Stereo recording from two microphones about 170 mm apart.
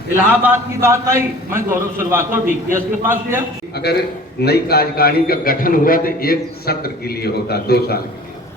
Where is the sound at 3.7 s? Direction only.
70° left (ahead or behind).